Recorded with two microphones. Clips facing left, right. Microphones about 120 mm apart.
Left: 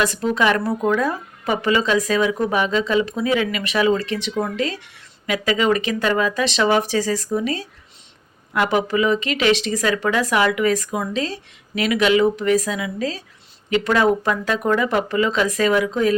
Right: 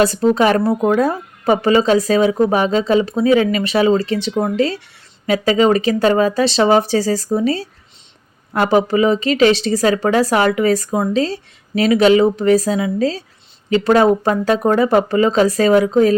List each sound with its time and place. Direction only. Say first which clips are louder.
0.0 s speech: right 6 dB; 30° right (ahead or behind)